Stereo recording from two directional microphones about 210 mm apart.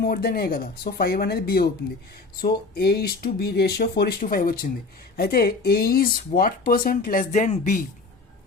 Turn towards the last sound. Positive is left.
turn(degrees=35)  # may be behind; listen again after turning